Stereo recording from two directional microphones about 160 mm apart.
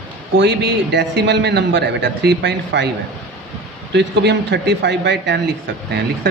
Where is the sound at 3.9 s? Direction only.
90° right.